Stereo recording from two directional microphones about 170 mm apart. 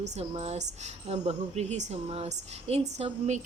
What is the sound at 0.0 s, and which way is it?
A woman's voice, 40° right (ahead or behind).